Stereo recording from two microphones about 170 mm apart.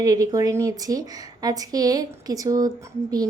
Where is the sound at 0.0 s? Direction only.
20° right (ahead or behind).